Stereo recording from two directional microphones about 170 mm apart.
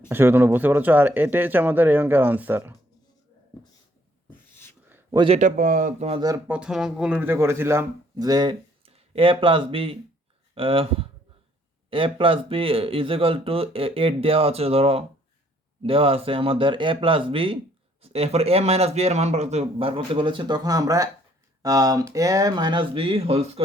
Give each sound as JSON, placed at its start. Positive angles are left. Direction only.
{"t": 0.1, "sound": "speech", "side_deg": -15}
{"t": 4.3, "sound": "a sound", "side_deg": 15}
{"t": 5.1, "sound": "speech", "side_deg": -30}
{"t": 5.4, "sound": "speech", "side_deg": -50}
{"t": 6.1, "sound": "speech", "side_deg": -25}
{"t": 6.5, "sound": "speech", "side_deg": -5}